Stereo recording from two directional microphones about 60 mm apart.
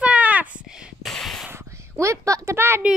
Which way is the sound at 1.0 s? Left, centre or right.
Centre.